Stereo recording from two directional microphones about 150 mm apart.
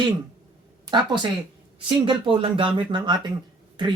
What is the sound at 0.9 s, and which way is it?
Speech, 30° right (ahead or behind).